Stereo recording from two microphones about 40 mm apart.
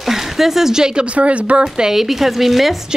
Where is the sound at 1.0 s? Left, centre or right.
Right.